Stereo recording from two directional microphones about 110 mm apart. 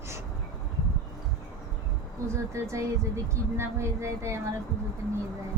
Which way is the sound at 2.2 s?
25° right (ahead or behind).